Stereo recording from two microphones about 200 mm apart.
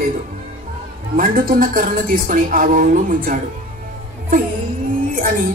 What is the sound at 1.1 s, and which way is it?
A woman's voice, 45° right (ahead or behind).